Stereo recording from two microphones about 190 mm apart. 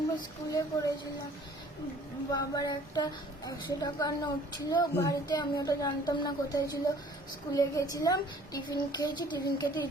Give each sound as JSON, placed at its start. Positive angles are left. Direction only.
{"t": 0.5, "sound": "a woman's voice", "side_deg": 20}
{"t": 2.3, "sound": "a woman's voice", "side_deg": 20}